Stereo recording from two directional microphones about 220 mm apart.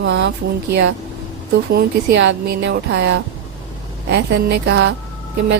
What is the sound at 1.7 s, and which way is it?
Speech, 50° right (ahead or behind).